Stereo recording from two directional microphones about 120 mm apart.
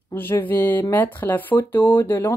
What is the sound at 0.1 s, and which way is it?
Speech, 15° left (ahead or behind).